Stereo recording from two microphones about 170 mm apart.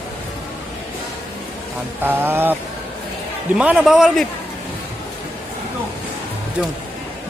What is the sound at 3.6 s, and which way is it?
Speech, 5° right (ahead or behind).